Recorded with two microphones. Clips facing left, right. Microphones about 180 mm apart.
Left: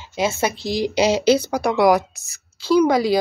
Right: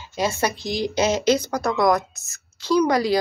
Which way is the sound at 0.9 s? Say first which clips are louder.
Left 3 dB; 10° left (ahead or behind).